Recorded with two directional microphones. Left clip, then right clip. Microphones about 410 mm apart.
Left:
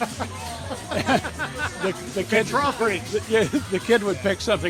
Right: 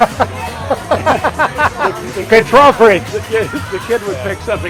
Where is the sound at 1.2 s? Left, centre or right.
Centre.